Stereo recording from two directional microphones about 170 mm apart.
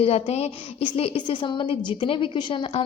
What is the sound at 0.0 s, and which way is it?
A woman's voice, 35° left (ahead or behind).